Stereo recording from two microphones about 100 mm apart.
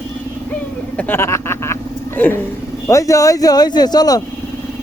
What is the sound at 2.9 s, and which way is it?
Speech, 35° left (ahead or behind).